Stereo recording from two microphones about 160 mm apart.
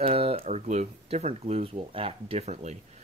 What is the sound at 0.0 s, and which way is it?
Speech, 35° right (ahead or behind).